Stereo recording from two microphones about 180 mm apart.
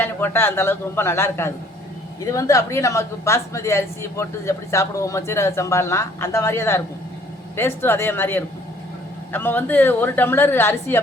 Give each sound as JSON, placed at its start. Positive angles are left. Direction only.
{"t": 0.0, "sound": "a woman's voice", "side_deg": 10}